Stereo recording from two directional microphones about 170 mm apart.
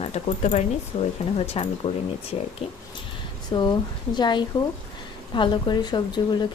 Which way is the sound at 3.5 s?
25° left (ahead or behind).